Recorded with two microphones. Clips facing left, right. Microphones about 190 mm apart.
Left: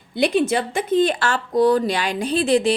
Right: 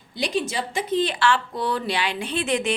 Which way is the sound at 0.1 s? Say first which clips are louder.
Left 8 dB; 55° left (ahead or behind).